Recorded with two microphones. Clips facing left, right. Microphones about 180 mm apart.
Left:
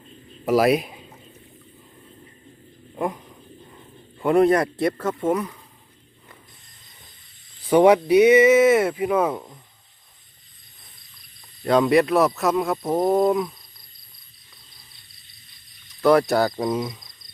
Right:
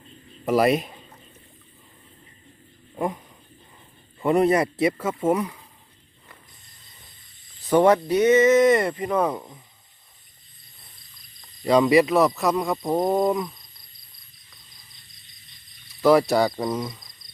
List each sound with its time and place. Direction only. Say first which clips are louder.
0.4 s a sound: left 1 dB; 5° left (ahead or behind)
2.9 s a sound: left 1 dB; centre (ahead or behind)
4.2 s speech: left 2 dB; centre (ahead or behind)
7.6 s speech: left 2 dB; 10° left (ahead or behind)
11.6 s speech: even; centre (ahead or behind)
16.0 s speech: even; centre (ahead or behind)